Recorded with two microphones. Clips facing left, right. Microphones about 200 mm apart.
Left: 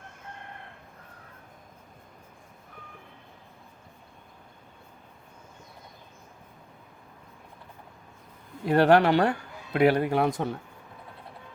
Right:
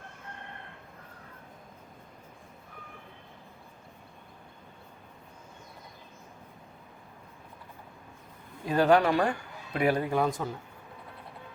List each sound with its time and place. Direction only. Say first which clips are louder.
8.6 s speech: left 3 dB; 65° left (ahead or behind)